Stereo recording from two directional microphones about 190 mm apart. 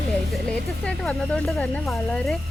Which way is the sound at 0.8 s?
5° left (ahead or behind).